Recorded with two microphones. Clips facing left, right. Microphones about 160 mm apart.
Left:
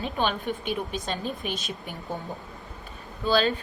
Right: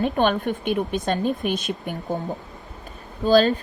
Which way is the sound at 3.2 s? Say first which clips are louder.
Right 7 dB; 40° right (ahead or behind).